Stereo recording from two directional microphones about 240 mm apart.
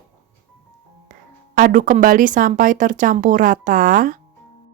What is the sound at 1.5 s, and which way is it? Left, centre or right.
Speech, right.